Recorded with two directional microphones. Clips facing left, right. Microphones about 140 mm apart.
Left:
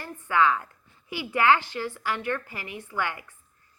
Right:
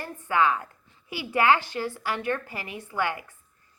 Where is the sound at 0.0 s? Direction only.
15° right (ahead or behind).